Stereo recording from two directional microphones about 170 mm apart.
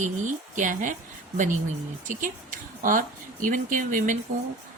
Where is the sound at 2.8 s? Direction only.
50° right (ahead or behind).